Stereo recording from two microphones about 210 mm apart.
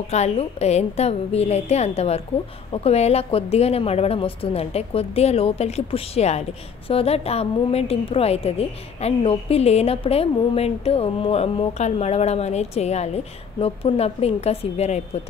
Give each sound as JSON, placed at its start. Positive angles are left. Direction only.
{"t": 0.1, "sound": "a woman's voice", "side_deg": 30}